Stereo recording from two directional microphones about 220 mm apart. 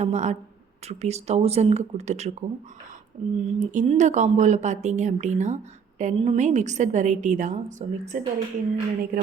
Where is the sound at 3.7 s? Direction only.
35° right (ahead or behind).